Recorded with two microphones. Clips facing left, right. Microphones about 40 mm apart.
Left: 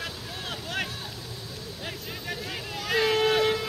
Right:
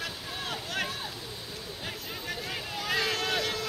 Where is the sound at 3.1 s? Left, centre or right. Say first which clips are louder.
Left 7 dB; centre.